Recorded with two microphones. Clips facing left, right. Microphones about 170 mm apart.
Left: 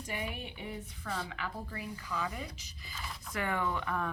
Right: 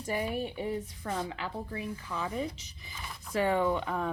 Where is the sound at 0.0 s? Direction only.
40° right (ahead or behind).